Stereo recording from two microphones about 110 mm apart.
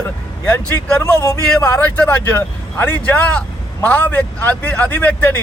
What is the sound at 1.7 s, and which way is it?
Speech, 15° left (ahead or behind).